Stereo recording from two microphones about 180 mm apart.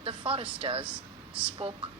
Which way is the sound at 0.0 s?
30° right (ahead or behind).